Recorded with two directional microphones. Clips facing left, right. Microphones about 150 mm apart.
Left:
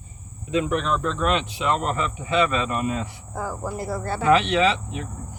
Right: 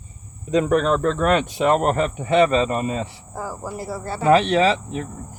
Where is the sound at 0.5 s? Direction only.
40° right (ahead or behind).